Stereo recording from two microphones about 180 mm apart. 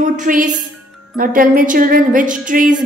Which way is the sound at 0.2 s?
50° right (ahead or behind).